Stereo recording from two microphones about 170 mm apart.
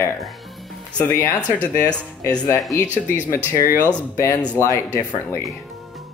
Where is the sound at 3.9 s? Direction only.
10° left (ahead or behind).